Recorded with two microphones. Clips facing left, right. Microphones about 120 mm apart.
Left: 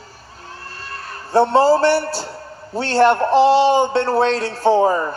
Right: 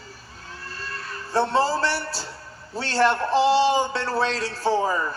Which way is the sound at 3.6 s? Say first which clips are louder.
Left 6 dB; 30° left (ahead or behind).